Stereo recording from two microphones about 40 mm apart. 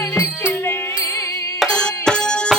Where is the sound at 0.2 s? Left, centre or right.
Left.